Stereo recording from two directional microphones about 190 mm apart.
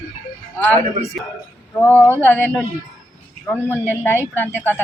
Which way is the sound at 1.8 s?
10° left (ahead or behind).